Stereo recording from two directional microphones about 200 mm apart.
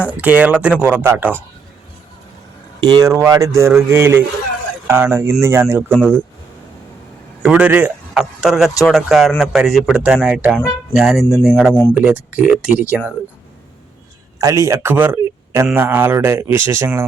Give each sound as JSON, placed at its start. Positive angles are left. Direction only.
{"t": 0.1, "sound": "speech", "side_deg": -5}
{"t": 2.8, "sound": "speech", "side_deg": -20}
{"t": 5.9, "sound": "speech", "side_deg": 5}
{"t": 7.4, "sound": "speech", "side_deg": -5}
{"t": 14.3, "sound": "speech", "side_deg": -15}